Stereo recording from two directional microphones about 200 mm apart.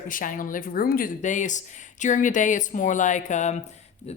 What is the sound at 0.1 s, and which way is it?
Speech, 40° left (ahead or behind).